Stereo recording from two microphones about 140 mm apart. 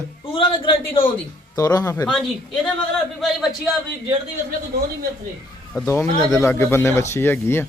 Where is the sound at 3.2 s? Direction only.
Centre (ahead or behind).